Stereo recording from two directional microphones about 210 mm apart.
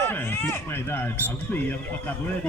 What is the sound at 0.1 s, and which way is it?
Speech, 10° left (ahead or behind).